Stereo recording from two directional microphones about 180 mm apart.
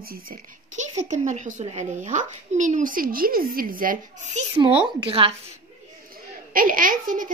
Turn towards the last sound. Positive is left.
turn(degrees=-50)  # may be behind; listen again after turning